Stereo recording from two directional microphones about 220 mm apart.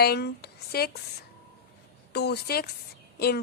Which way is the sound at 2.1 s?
50° left (ahead or behind).